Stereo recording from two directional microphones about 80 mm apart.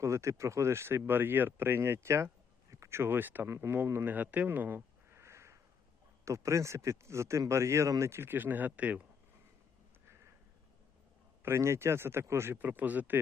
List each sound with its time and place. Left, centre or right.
0.0 s speech: right
5.2 s a sound: right
6.2 s a man's voice: right; by 9.0 s centre
11.4 s a man's voice: right
12.5 s speech: right